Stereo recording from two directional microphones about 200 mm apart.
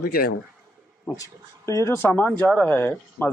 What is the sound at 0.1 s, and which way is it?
Speech, 50° left (ahead or behind).